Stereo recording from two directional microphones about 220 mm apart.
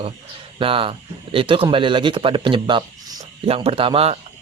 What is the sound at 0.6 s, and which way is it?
Speech, 25° right (ahead or behind).